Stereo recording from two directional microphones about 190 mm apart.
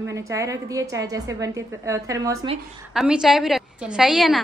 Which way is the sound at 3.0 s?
Centre (ahead or behind).